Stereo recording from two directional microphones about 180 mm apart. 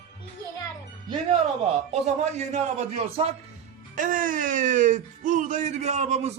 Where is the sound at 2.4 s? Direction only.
40° right (ahead or behind).